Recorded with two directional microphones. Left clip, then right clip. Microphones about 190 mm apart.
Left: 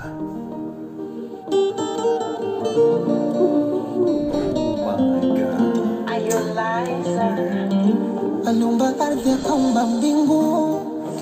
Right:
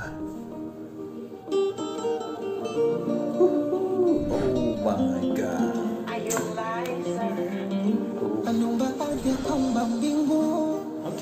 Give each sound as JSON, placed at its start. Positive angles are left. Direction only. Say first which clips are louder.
{"t": 1.5, "sound": "music", "louder": "left 6 dB", "side_deg": 40}